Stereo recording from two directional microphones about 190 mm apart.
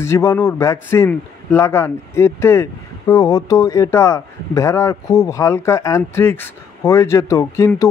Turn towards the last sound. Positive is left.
turn(degrees=15)  # may be behind; listen again after turning